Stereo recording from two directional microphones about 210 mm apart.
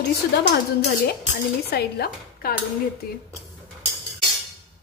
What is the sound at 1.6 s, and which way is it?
Speech, 50° left (ahead or behind).